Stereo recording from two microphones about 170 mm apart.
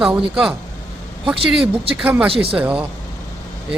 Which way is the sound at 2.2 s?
30° right (ahead or behind).